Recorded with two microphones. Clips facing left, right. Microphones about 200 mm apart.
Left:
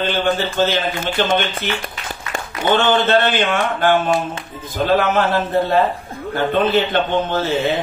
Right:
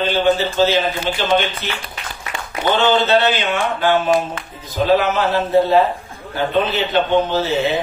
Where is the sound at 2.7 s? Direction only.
50° left (ahead or behind).